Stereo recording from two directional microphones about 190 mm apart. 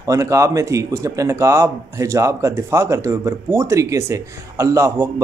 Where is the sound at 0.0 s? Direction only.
15° right (ahead or behind).